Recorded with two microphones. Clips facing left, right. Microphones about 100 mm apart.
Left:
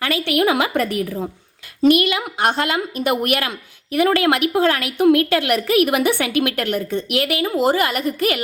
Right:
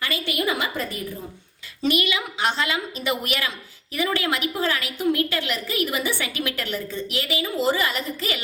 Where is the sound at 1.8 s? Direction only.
55° left (ahead or behind).